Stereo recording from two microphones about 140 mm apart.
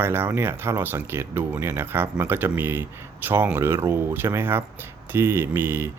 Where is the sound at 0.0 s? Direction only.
15° right (ahead or behind).